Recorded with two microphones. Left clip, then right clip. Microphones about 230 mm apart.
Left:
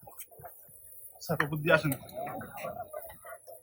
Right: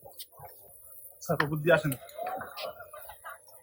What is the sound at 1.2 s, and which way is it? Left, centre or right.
Speech, right.